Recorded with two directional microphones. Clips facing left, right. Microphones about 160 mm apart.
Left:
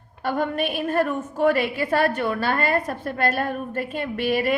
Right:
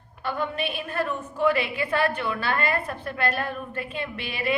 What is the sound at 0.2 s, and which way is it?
A woman's voice, 50° left (ahead or behind).